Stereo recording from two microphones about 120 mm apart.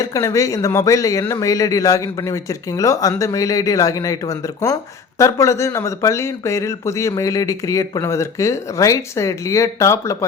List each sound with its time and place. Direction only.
0.0 s a man's voice: 25° left (ahead or behind)